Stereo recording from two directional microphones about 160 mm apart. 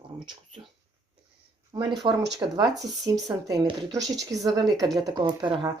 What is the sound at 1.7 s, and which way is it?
Speech, 25° right (ahead or behind).